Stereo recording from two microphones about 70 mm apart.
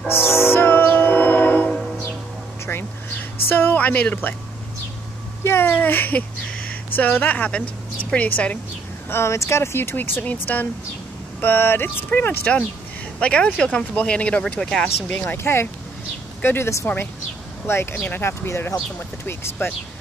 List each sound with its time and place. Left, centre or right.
0.1 s train: left
2.6 s a sound: left
5.4 s speech: left
9.1 s speech: left; by 14.9 s centre
15.0 s speech: left